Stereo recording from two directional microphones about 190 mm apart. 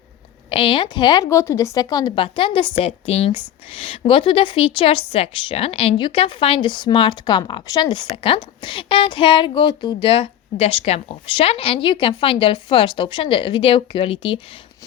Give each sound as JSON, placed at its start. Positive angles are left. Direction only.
{"t": 0.5, "sound": "a woman's voice", "side_deg": 25}